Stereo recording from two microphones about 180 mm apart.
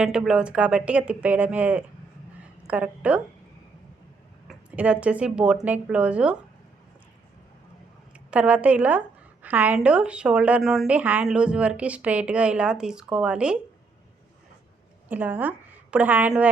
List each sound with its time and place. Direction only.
0.0 s a woman's voice: 5° right (ahead or behind)
4.4 s a woman's voice: 5° right (ahead or behind)
8.3 s a woman's voice: 5° right (ahead or behind)
15.1 s a woman's voice: 10° right (ahead or behind)